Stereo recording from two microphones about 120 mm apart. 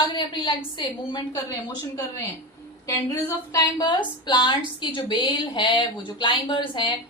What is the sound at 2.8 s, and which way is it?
A woman's voice, 25° left (ahead or behind).